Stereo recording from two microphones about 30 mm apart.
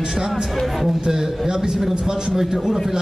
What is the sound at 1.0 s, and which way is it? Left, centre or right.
Speech, right.